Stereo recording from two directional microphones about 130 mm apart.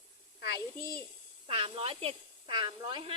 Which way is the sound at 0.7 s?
25° left (ahead or behind).